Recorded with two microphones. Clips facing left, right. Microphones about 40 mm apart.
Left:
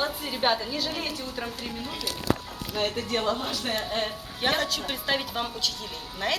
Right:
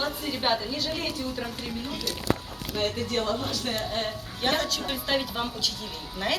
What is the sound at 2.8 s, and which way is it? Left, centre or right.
Speech, centre.